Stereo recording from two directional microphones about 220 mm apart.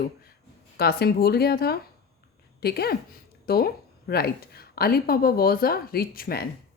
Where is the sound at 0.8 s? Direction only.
45° left (ahead or behind).